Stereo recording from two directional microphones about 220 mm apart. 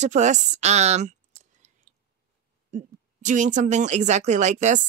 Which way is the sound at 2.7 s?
35° right (ahead or behind).